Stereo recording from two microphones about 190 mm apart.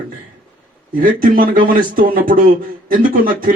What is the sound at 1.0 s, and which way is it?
Speech, 45° right (ahead or behind).